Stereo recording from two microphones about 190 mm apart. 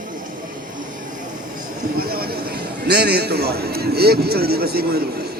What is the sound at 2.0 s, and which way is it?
A man's voice, 55° right (ahead or behind).